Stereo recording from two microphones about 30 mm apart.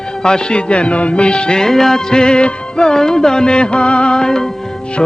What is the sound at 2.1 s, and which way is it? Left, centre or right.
Music, left.